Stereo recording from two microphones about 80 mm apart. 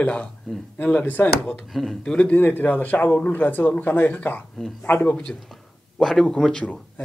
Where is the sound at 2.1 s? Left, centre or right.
Centre.